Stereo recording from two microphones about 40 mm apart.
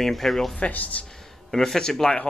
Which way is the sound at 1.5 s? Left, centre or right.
Centre.